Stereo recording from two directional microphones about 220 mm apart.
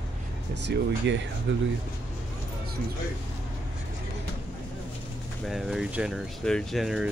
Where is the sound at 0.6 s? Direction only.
55° right (ahead or behind).